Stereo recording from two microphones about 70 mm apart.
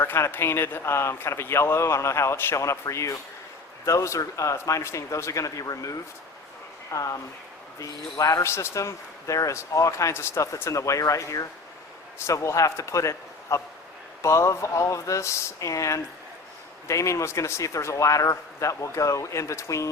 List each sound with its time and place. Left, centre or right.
0.0 s speech: left
2.6 s speech: left
8.4 s speech: left